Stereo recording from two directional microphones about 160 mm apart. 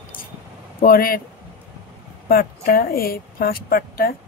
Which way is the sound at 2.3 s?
70° left (ahead or behind).